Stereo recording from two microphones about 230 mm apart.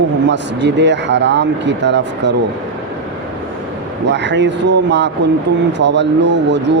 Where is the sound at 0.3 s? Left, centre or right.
Right.